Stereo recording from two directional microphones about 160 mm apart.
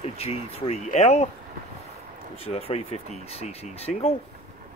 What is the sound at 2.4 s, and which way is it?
Speech, 35° left (ahead or behind).